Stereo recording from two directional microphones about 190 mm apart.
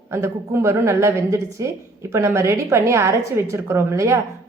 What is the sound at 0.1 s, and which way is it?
A woman's voice, 15° right (ahead or behind).